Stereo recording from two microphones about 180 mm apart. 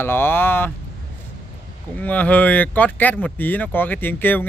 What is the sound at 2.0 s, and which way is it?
Speech, 10° left (ahead or behind).